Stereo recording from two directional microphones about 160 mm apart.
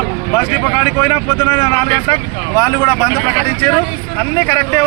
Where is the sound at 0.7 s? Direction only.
25° left (ahead or behind).